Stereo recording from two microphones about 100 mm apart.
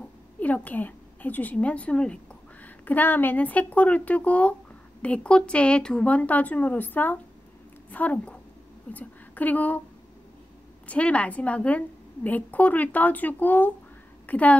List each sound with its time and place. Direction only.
0.4 s a woman's voice: 15° left (ahead or behind)
10.9 s a woman's voice: 15° left (ahead or behind)